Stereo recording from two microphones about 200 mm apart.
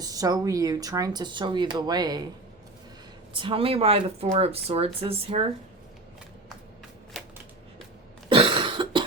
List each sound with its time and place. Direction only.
0.0 s speech: 15° right (ahead or behind)
3.3 s speech: 25° right (ahead or behind)
8.3 s cough: 25° right (ahead or behind)